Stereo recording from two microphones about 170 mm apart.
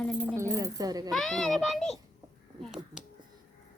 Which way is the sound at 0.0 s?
10° left (ahead or behind).